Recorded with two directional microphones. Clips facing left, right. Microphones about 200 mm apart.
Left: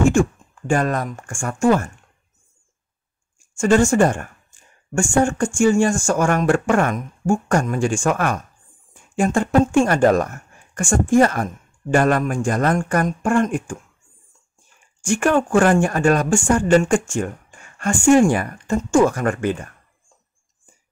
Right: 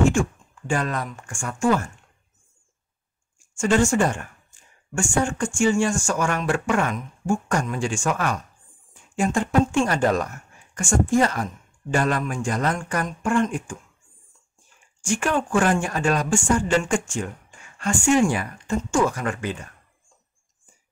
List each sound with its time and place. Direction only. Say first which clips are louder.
0.1 s speech: left 6 dB; 50° left (ahead or behind)
3.5 s speech: left 4 dB; 45° left (ahead or behind)
15.0 s speech: left 6 dB; 55° left (ahead or behind)